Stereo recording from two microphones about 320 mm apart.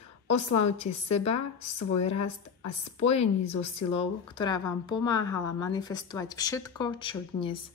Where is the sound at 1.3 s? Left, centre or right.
Left.